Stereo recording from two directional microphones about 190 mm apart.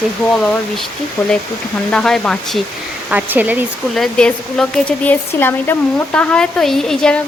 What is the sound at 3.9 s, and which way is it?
Speech, 5° left (ahead or behind).